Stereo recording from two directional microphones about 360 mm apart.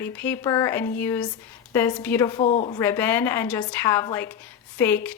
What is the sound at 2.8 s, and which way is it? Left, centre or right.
A woman's voice, centre.